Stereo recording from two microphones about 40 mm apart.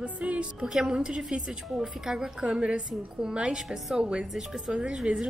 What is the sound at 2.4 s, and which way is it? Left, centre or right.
Speech, right.